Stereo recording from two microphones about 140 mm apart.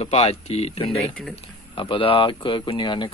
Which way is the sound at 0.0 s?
50° left (ahead or behind).